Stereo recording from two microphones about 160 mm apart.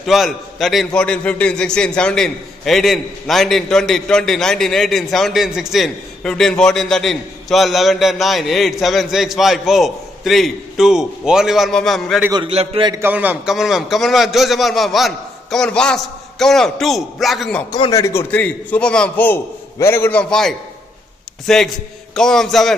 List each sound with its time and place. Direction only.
0.0 s a man's voice: centre (ahead or behind)
12.4 s a man's voice: 35° right (ahead or behind)
12.9 s a man's voice: 10° right (ahead or behind)
17.7 s speech: 30° left (ahead or behind)
18.0 s a man's voice: 15° left (ahead or behind)